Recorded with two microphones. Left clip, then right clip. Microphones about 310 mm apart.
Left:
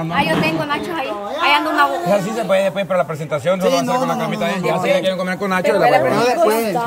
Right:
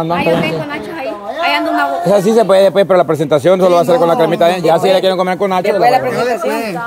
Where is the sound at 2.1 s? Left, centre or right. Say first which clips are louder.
Right 7 dB; centre.